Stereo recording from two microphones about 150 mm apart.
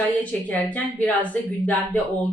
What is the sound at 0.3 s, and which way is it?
Speech, 10° left (ahead or behind).